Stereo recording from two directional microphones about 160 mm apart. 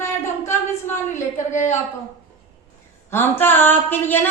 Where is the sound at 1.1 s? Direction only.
50° left (ahead or behind).